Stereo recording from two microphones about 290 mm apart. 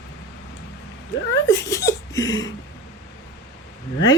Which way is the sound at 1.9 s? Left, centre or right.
Centre.